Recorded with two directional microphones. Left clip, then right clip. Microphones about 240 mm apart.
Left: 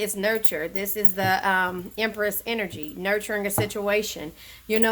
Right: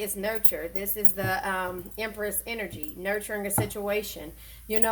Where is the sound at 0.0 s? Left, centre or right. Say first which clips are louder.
Left 6 dB; left.